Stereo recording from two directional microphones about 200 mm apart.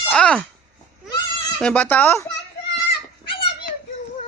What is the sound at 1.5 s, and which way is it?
Speech, 5° left (ahead or behind).